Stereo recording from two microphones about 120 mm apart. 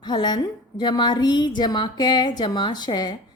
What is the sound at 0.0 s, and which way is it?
A woman's voice, 40° left (ahead or behind).